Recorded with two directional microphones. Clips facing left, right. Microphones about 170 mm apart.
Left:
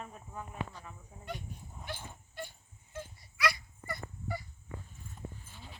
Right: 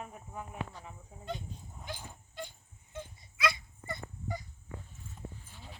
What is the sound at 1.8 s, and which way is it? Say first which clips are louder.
Dog: left 1 dB; 15° right (ahead or behind).